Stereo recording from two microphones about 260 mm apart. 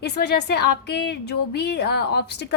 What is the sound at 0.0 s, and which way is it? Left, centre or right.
A woman's voice, left.